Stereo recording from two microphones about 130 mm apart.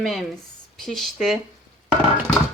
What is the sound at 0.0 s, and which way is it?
Speech, centre (ahead or behind).